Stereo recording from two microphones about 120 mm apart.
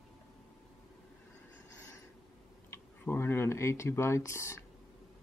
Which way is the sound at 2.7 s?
20° left (ahead or behind).